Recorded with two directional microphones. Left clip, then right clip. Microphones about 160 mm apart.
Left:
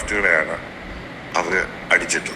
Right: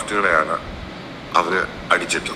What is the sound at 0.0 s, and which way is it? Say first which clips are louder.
A man's voice: even; 5° right (ahead or behind).